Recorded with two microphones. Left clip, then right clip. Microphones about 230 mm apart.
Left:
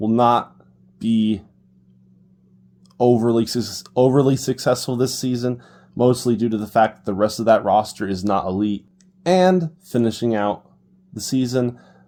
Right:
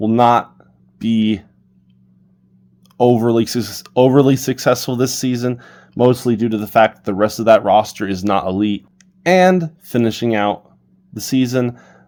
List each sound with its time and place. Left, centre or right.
0.0 s speech: right
3.0 s speech: right